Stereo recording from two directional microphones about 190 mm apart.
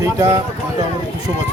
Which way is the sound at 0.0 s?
15° right (ahead or behind).